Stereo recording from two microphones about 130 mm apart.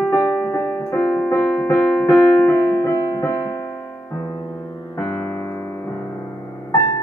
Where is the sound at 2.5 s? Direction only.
20° left (ahead or behind).